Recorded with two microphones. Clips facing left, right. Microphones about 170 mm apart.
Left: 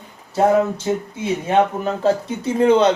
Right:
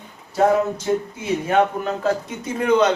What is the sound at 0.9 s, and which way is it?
Speech, 20° left (ahead or behind).